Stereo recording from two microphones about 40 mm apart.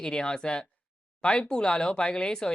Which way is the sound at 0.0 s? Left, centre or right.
Centre.